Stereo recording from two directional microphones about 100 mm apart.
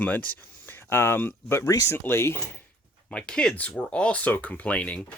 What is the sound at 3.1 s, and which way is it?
Speech, 10° left (ahead or behind).